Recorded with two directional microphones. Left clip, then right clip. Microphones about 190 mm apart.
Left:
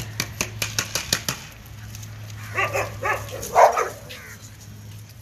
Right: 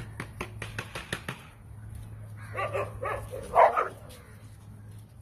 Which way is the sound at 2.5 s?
60° right (ahead or behind).